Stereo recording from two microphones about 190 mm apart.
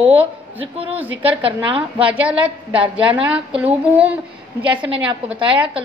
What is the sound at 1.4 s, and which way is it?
Speech, 30° right (ahead or behind).